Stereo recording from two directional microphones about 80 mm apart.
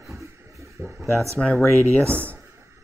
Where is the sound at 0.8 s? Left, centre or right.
Right.